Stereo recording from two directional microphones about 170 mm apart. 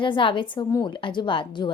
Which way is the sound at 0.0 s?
30° left (ahead or behind).